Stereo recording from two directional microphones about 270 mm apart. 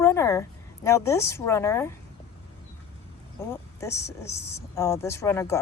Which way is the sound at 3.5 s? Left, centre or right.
Centre.